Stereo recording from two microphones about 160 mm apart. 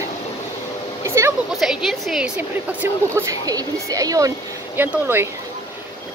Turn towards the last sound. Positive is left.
turn(degrees=-15)  # may be behind; listen again after turning